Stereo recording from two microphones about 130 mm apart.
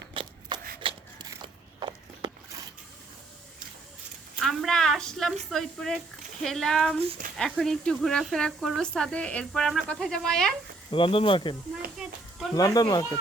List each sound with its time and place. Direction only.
0.1 s shuffling cards: 40° right (ahead or behind)
0.8 s a sound: 40° right (ahead or behind)
4.4 s speech: 5° left (ahead or behind)
10.9 s speech: 40° left (ahead or behind)
12.5 s speech: 30° left (ahead or behind)